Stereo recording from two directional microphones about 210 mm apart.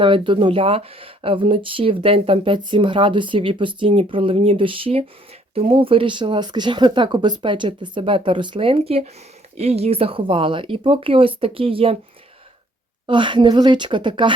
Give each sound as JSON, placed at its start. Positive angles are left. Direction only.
{"t": 0.0, "sound": "speech", "side_deg": -25}
{"t": 13.1, "sound": "speech", "side_deg": -25}